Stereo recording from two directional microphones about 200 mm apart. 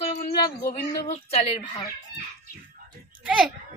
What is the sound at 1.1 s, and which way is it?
Speech, 30° left (ahead or behind).